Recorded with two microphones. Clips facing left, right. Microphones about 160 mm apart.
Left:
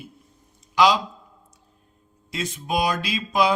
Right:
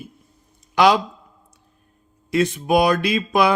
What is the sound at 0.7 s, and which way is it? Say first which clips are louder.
Speech: right 3 dB; 60° right (ahead or behind).